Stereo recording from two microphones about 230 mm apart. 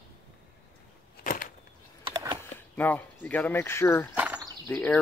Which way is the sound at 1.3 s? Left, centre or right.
Left.